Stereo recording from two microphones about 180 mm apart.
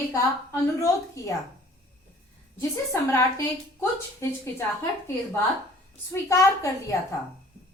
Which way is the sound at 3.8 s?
15° left (ahead or behind).